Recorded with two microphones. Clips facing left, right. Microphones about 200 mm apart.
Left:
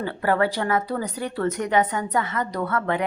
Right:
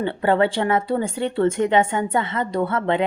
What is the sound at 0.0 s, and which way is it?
A woman's voice, 25° right (ahead or behind).